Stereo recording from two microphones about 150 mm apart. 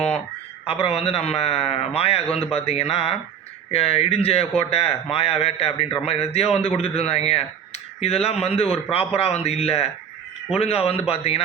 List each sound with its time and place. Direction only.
0.6 s a man's voice: 40° left (ahead or behind)